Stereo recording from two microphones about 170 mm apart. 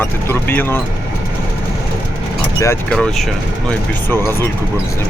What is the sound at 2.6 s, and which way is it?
Speech, 15° left (ahead or behind).